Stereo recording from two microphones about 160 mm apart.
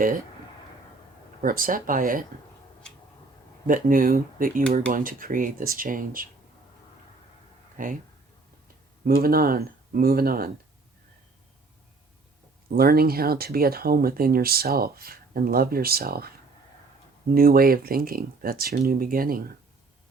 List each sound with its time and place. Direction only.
1.4 s speech: 60° right (ahead or behind)
3.7 s speech: 60° right (ahead or behind)
7.8 s speech: 55° right (ahead or behind)
8.6 s speech: 70° right (ahead or behind)
12.7 s speech: 70° right (ahead or behind)